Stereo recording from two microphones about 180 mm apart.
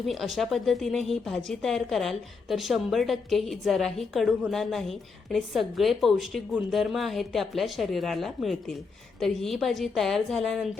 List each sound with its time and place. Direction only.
0.0 s speech: centre (ahead or behind)